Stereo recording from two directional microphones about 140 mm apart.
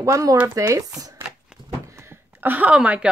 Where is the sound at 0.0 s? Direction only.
20° right (ahead or behind).